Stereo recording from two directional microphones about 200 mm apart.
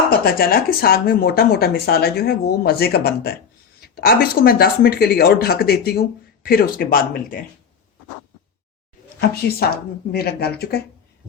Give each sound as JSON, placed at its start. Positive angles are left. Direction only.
{"t": 0.1, "sound": "speech", "side_deg": 50}
{"t": 9.3, "sound": "speech", "side_deg": 50}